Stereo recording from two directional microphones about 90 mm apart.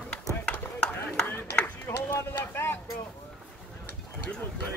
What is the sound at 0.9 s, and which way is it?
Chop, 20° left (ahead or behind).